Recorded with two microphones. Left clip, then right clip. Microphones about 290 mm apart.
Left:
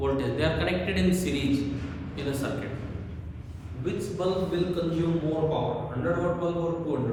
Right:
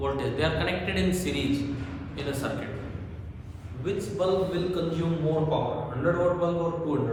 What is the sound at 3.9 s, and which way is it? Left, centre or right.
Speech, centre.